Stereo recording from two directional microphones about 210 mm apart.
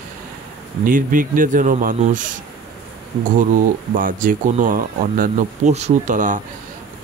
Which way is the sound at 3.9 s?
40° right (ahead or behind).